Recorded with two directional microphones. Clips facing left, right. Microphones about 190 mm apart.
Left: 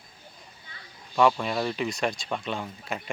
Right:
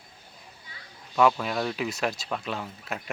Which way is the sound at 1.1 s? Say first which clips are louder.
Even; centre (ahead or behind).